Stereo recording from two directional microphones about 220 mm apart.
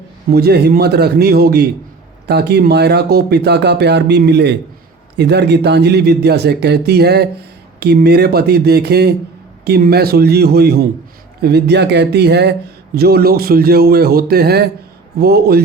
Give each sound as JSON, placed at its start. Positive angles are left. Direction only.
{"t": 0.3, "sound": "speech", "side_deg": -45}